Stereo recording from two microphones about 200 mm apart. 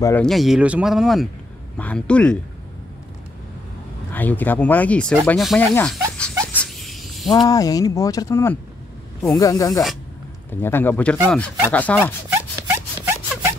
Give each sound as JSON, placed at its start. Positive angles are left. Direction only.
{"t": 0.0, "sound": "speech", "side_deg": 5}
{"t": 4.1, "sound": "speech", "side_deg": 10}
{"t": 6.5, "sound": "a sound", "side_deg": 5}
{"t": 7.4, "sound": "speech", "side_deg": 15}
{"t": 12.3, "sound": "zipper", "side_deg": -10}